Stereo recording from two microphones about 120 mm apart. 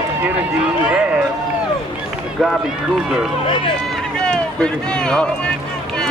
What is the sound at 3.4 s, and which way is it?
Speech, 45° left (ahead or behind).